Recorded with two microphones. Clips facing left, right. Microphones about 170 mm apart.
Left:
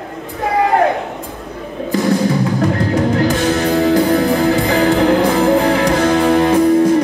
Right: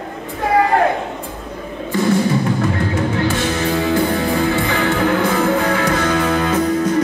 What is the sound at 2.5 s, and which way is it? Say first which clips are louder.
Music: left 4 dB; 40° left (ahead or behind).